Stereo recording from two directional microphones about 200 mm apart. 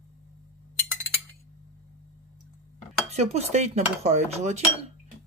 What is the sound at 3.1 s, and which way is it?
Speech, 35° right (ahead or behind).